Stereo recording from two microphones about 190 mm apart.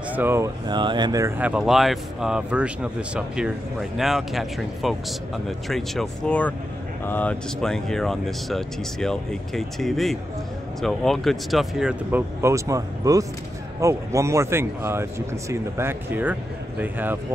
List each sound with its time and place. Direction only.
0.1 s speech: 10° right (ahead or behind)
1.4 s speech: 5° right (ahead or behind)